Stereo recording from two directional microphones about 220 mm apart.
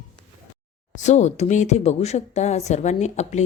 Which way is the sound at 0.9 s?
30° left (ahead or behind).